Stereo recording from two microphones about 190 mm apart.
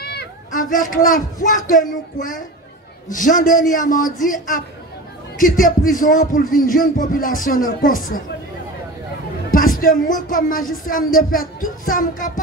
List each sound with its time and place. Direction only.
0.0 s a man's voice: 55° left (ahead or behind)
9.5 s a man's voice: 45° left (ahead or behind)